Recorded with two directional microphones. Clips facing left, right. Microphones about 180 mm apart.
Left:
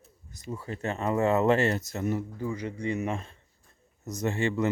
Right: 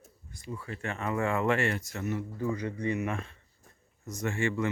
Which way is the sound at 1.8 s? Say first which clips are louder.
Left 4 dB; 25° left (ahead or behind).